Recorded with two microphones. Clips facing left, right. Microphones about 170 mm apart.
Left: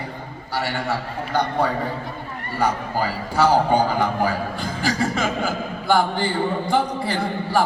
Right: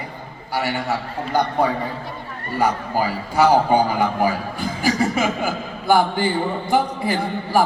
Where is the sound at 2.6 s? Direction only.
15° right (ahead or behind).